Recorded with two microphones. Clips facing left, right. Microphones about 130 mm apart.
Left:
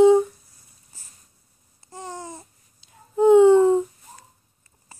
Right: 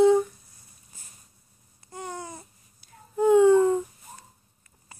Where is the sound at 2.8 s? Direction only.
20° left (ahead or behind).